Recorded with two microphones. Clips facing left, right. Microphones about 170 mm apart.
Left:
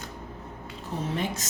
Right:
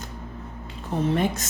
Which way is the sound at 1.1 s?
55° right (ahead or behind).